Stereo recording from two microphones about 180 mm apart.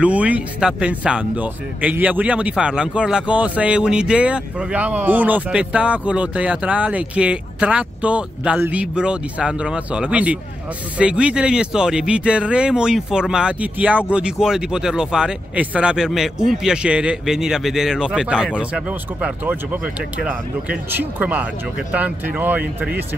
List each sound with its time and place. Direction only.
0.0 s speech: 5° right (ahead or behind)